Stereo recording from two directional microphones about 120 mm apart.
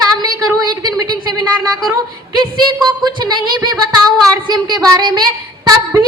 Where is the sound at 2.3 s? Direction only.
35° right (ahead or behind).